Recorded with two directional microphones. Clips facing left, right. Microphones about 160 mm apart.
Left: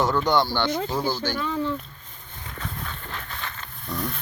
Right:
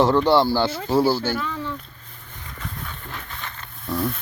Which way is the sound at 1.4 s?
30° left (ahead or behind).